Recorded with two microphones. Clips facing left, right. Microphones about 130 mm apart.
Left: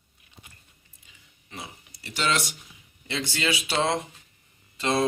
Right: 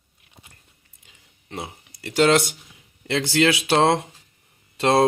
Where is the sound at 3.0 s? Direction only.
70° right (ahead or behind).